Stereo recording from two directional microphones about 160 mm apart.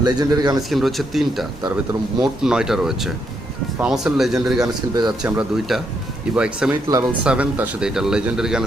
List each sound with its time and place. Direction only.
0.0 s speech: 25° right (ahead or behind)
0.7 s speech: centre (ahead or behind)
4.6 s speech: 25° right (ahead or behind)
5.4 s speech: centre (ahead or behind)
6.8 s speech: 25° right (ahead or behind)
7.3 s speech: 10° right (ahead or behind)